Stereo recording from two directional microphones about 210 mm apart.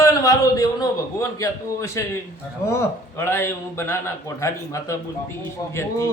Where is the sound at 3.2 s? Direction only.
10° left (ahead or behind).